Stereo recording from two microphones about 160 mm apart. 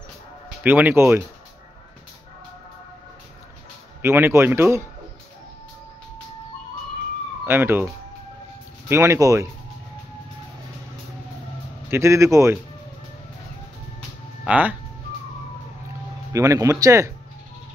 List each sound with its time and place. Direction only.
0.7 s speech: 10° right (ahead or behind)
4.0 s speech: 15° right (ahead or behind)
7.4 s speech: 15° right (ahead or behind)
11.9 s speech: 15° right (ahead or behind)
14.4 s speech: 10° right (ahead or behind)
16.3 s speech: 20° right (ahead or behind)